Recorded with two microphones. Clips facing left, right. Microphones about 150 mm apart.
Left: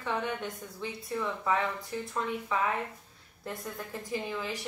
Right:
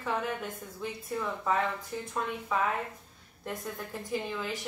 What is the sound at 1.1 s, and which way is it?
Speech, 5° right (ahead or behind).